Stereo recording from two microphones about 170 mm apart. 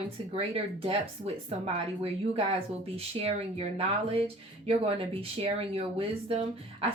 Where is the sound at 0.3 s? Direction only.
35° right (ahead or behind).